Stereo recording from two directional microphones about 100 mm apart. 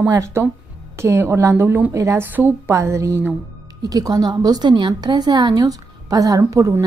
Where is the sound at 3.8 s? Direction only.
40° right (ahead or behind).